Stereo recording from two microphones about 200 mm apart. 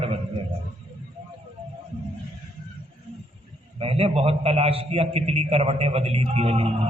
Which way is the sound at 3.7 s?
30° right (ahead or behind).